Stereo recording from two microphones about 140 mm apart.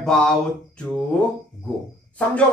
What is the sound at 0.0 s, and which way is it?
Mantra, 5° left (ahead or behind).